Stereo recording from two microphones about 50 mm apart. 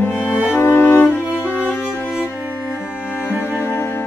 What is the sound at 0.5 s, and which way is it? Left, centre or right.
Cello, left.